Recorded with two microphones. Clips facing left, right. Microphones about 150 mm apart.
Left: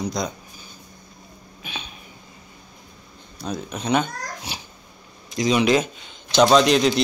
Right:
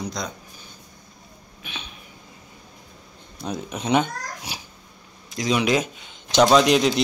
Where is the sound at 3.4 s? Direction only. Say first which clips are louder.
Even; 20° right (ahead or behind).